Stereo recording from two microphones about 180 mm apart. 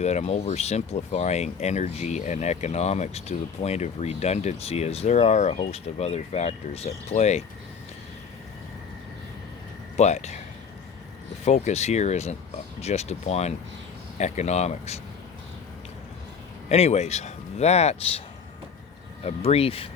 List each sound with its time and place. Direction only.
0.0 s speech: 35° left (ahead or behind)
10.0 s speech: 40° left (ahead or behind)
11.4 s speech: 40° left (ahead or behind)
16.6 s speech: 35° left (ahead or behind)
19.2 s speech: 35° left (ahead or behind)